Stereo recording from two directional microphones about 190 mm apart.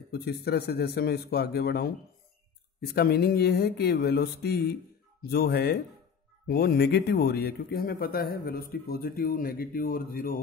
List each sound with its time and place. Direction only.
0.1 s speech: 55° left (ahead or behind)